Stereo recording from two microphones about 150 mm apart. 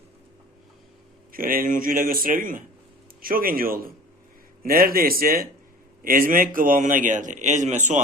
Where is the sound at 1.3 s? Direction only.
70° right (ahead or behind).